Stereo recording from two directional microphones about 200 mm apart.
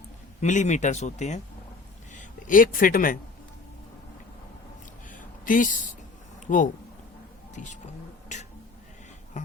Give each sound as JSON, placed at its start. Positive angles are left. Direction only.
{"t": 0.4, "sound": "speech", "side_deg": 35}
{"t": 5.1, "sound": "a sound", "side_deg": 40}
{"t": 6.5, "sound": "speech", "side_deg": 40}
{"t": 8.3, "sound": "music", "side_deg": 35}